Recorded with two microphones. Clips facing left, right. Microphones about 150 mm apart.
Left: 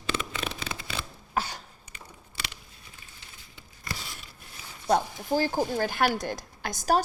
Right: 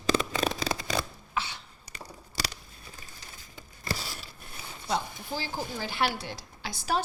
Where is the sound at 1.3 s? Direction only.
40° left (ahead or behind).